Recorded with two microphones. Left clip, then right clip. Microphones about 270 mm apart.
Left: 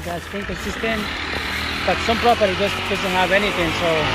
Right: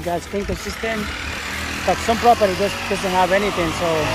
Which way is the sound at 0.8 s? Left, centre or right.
Centre.